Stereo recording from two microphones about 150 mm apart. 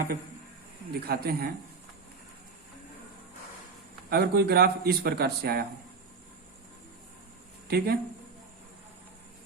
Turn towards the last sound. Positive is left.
turn(degrees=-90)